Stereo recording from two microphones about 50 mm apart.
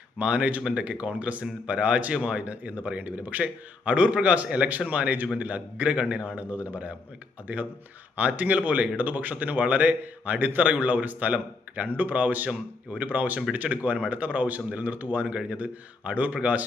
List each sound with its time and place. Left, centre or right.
0.2 s speech: right